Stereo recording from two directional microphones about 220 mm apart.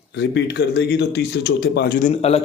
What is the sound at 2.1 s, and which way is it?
Speech, 30° left (ahead or behind).